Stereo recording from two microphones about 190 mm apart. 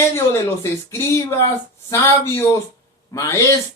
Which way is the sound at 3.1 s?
15° left (ahead or behind).